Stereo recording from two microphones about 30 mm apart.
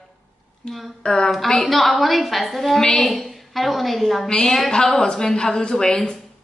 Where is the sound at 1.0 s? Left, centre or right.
Left.